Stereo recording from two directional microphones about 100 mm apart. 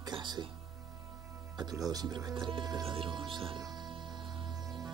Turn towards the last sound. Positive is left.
turn(degrees=-50)  # may be behind; listen again after turning